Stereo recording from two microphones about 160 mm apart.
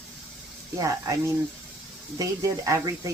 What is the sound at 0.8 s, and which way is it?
Speech, 20° right (ahead or behind).